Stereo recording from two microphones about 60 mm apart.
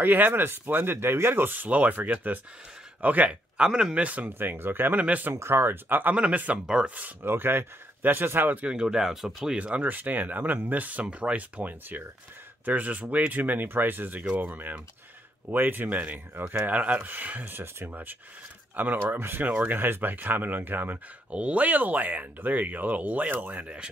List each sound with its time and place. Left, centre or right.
0.0 s speech: right
4.3 s speech: right
5.3 s speech: right
6.1 s speech: right
6.6 s speech: centre
7.0 s speech: right
8.6 s speech: centre
9.6 s speech: right
19.4 s speech: right
21.3 s speech: right